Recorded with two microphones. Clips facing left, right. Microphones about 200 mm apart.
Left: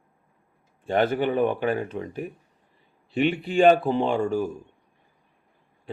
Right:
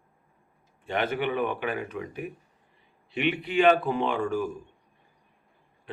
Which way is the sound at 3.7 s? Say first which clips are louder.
Left 3 dB; 30° left (ahead or behind).